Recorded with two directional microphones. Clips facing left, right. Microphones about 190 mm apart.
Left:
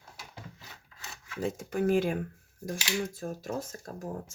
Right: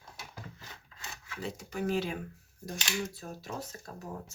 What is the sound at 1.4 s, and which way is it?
Speech, 50° left (ahead or behind).